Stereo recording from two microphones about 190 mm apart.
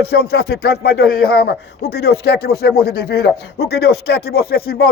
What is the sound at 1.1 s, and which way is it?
Speech, 55° left (ahead or behind).